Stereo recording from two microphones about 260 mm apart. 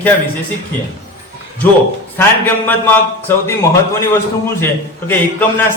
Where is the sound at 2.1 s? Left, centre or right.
Centre.